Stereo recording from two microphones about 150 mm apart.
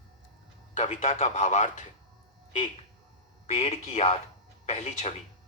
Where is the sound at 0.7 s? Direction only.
55° left (ahead or behind).